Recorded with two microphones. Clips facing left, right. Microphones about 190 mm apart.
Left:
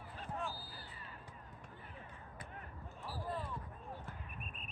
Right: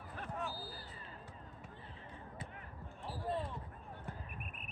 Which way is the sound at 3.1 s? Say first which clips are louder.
Right 3 dB; 25° right (ahead or behind).